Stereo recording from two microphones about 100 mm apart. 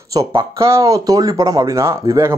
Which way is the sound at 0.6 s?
30° right (ahead or behind).